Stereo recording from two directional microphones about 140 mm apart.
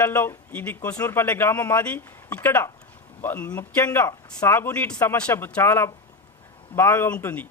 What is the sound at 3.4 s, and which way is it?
Speech, 25° left (ahead or behind).